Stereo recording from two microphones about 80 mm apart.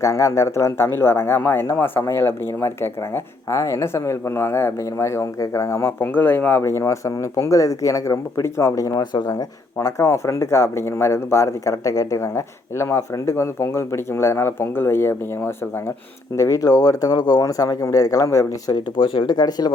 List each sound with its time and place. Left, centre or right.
0.0 s speech: left
3.5 s speech: left
6.6 s speech: left
16.3 s speech: left
18.7 s speech: left